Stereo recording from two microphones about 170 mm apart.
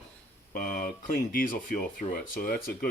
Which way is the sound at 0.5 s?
55° left (ahead or behind).